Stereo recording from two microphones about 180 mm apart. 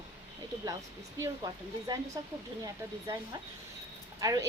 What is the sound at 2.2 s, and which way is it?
Speech, 20° right (ahead or behind).